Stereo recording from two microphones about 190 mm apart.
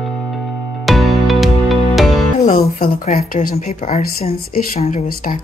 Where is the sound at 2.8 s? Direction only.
50° left (ahead or behind).